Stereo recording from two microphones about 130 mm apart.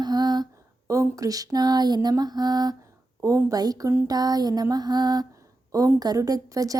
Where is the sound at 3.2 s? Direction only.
25° right (ahead or behind).